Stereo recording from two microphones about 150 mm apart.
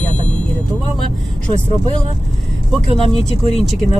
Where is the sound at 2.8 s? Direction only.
40° right (ahead or behind).